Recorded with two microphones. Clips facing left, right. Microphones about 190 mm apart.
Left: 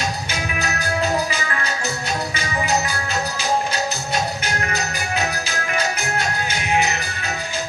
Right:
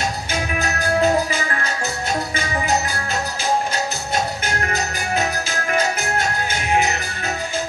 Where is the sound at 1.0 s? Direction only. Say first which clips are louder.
Right 4 dB; 50° right (ahead or behind).